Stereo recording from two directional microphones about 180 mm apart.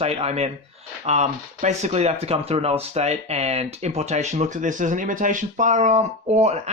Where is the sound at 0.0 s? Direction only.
35° right (ahead or behind).